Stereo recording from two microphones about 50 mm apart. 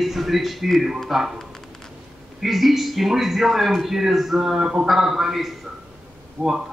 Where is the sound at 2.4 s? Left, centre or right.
Centre.